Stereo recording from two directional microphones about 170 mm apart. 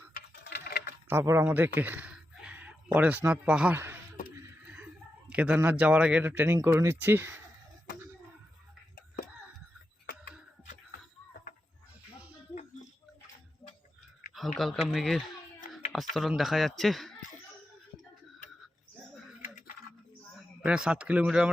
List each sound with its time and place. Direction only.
0.1 s tick-tock: 60° left (ahead or behind)
1.0 s speech: 15° right (ahead or behind)
5.3 s speech: 10° right (ahead or behind)
14.3 s speech: centre (ahead or behind)
20.7 s speech: 5° right (ahead or behind)